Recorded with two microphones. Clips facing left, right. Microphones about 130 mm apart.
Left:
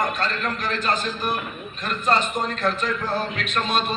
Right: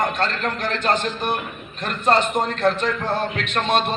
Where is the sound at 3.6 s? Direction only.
70° right (ahead or behind).